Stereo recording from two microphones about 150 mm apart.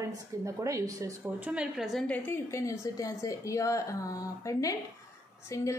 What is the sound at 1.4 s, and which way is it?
Speech, 5° right (ahead or behind).